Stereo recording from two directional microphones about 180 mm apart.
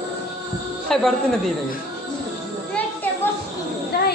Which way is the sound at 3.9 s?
60° left (ahead or behind).